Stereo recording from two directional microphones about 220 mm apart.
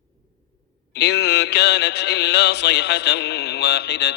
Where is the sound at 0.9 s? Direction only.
50° left (ahead or behind).